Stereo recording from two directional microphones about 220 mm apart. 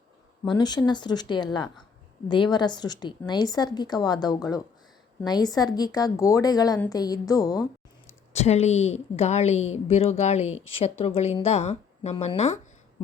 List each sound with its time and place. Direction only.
0.4 s a woman's voice: 20° left (ahead or behind)
8.3 s speech: 30° left (ahead or behind)